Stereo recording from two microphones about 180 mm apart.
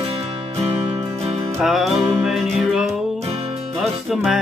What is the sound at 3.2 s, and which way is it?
Music, 30° right (ahead or behind).